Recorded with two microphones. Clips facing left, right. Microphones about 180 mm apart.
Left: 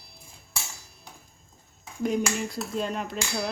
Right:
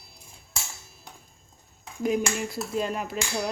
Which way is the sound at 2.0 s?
5° right (ahead or behind).